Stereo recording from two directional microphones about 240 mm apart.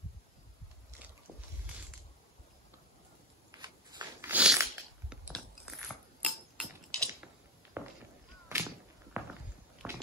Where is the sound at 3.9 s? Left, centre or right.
Centre.